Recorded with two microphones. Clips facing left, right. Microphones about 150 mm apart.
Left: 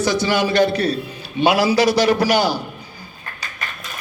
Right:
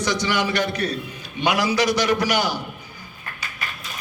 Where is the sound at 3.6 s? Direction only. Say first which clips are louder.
Left 2 dB; 45° left (ahead or behind).